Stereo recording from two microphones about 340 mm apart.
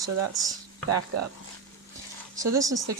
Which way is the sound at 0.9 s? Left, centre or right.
Right.